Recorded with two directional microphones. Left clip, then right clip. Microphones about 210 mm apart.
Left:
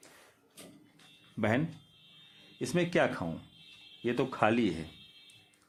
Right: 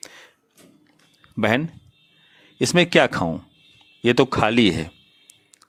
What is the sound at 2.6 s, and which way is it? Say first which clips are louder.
Speech: right 13 dB; 45° right (ahead or behind).